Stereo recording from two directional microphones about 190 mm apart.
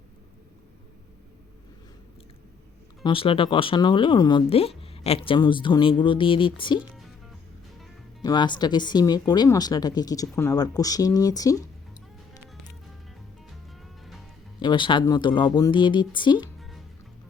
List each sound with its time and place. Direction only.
3.0 s speech: 30° left (ahead or behind)
8.2 s speech: 20° left (ahead or behind)
14.6 s speech: 25° left (ahead or behind)
16.6 s music: centre (ahead or behind)